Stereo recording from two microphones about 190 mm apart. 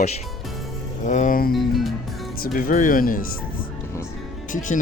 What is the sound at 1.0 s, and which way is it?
Speech, 40° left (ahead or behind).